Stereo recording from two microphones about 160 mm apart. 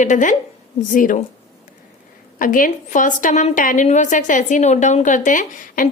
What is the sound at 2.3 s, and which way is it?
A woman's voice, 60° left (ahead or behind).